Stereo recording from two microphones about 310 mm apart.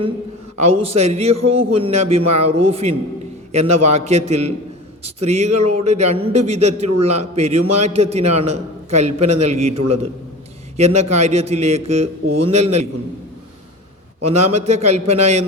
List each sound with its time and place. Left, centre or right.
0.6 s a man's voice: centre
14.3 s a man's voice: right